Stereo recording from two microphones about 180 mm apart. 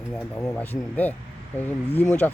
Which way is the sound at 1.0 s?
10° left (ahead or behind).